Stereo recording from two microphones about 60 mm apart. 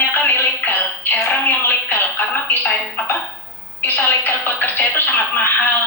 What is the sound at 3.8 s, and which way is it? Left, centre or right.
Speech, left.